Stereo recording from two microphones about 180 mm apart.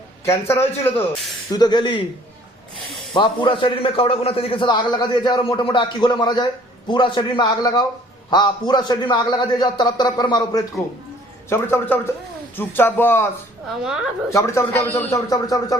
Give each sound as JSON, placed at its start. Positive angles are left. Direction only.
{"t": 0.3, "sound": "speech", "side_deg": 15}
{"t": 1.5, "sound": "a man's voice", "side_deg": 25}
{"t": 3.2, "sound": "a man's voice", "side_deg": 30}
{"t": 11.4, "sound": "speech", "side_deg": 10}
{"t": 14.3, "sound": "speech", "side_deg": 15}